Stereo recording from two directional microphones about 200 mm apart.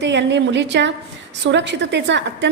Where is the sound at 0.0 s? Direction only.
60° right (ahead or behind).